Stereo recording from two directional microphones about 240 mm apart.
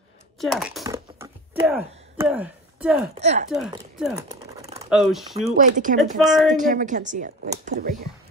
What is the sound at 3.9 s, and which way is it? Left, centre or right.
Speech, centre.